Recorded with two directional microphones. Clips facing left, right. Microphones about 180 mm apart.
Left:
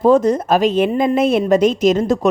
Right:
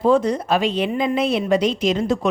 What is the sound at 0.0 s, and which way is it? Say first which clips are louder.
A woman's voice: left 4 dB; 45° left (ahead or behind).